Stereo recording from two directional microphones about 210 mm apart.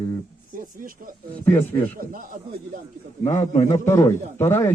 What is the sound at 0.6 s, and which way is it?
Speech, 40° right (ahead or behind).